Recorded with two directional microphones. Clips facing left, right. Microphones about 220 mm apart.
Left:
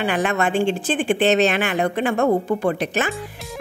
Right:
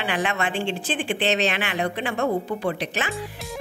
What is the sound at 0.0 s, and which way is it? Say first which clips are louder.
Speech: left 5 dB; 45° left (ahead or behind).